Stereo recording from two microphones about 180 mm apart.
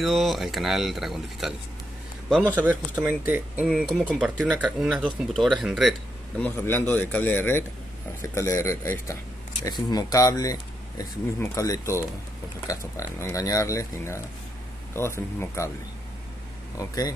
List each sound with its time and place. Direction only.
0.0 s a man's voice: centre (ahead or behind)
2.5 s speech: 10° right (ahead or behind); by 12.0 s 20° left (ahead or behind)
13.2 s speech: 20° left (ahead or behind)
16.7 s speech: 20° left (ahead or behind)